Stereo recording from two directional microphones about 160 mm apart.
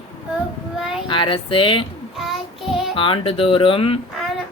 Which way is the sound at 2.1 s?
Centre (ahead or behind).